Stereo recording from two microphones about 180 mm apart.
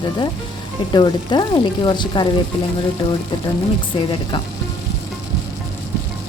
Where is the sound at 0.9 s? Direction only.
25° left (ahead or behind).